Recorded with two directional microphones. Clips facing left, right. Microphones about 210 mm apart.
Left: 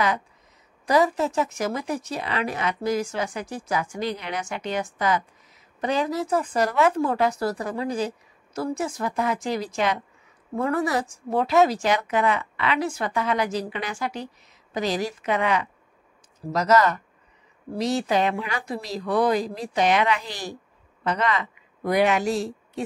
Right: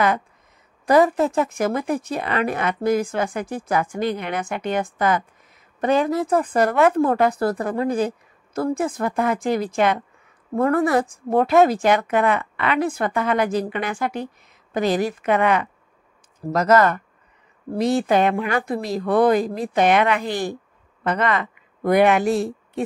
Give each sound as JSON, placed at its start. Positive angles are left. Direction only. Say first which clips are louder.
{"t": 0.8, "sound": "a woman's voice", "louder": "right 5 dB", "side_deg": -55}